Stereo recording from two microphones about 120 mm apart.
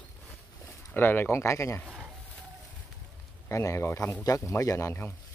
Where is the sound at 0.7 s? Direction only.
15° left (ahead or behind).